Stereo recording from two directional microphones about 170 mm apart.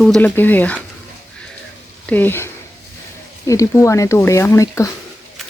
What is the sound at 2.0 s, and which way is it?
Speech, 10° left (ahead or behind).